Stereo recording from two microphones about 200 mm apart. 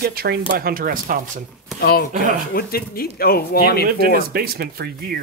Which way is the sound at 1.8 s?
50° left (ahead or behind).